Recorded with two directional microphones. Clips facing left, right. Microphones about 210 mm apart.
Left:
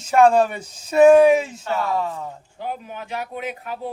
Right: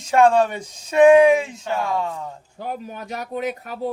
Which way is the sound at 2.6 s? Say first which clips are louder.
Right 1 dB; 40° right (ahead or behind).